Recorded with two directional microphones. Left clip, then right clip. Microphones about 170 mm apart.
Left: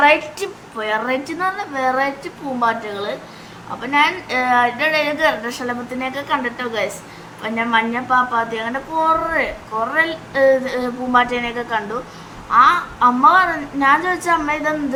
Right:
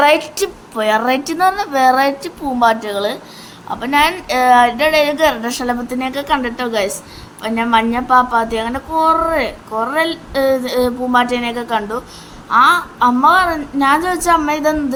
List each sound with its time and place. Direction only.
0.0 s a woman's voice: 45° right (ahead or behind)